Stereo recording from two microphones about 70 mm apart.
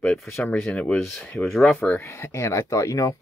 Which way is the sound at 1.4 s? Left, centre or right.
Centre.